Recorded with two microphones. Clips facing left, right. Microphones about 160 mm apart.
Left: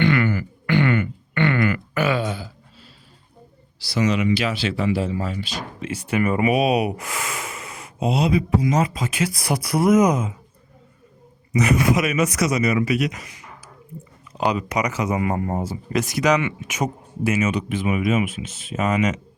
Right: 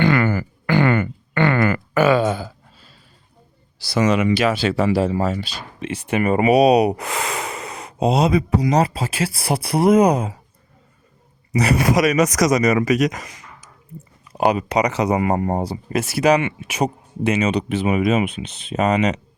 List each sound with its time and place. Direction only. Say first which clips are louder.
0.0 s a sound: right 2 dB; 35° right (ahead or behind)
3.8 s speech: right 3 dB; 50° right (ahead or behind); by 10.3 s 35° right (ahead or behind)
11.5 s speech: right 1 dB; 35° right (ahead or behind)
14.3 s speech: right 4 dB; 55° right (ahead or behind)
14.7 s speech: right 5 dB; 30° right (ahead or behind)